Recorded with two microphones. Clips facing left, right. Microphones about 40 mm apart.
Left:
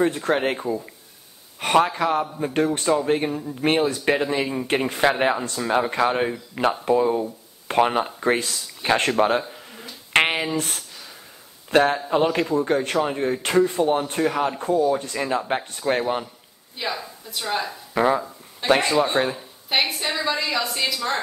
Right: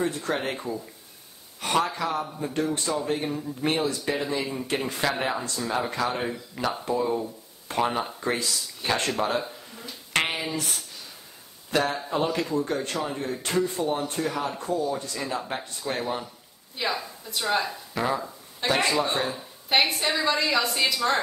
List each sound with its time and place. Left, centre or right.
0.0 s speech: left
0.6 s speech: left
1.6 s speech: left
10.1 s a sound: left
11.7 s speech: left
16.7 s speech: centre
17.9 s speech: left
19.7 s a woman's voice: centre